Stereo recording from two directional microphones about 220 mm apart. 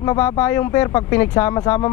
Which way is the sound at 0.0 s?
15° left (ahead or behind).